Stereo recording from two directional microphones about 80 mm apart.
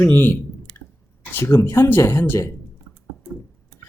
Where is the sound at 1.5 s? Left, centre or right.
Left.